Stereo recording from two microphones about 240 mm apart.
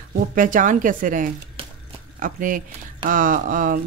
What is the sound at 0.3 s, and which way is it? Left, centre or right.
Speech, right.